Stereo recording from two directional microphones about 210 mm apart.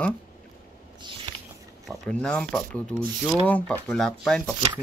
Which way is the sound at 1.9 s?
5° left (ahead or behind).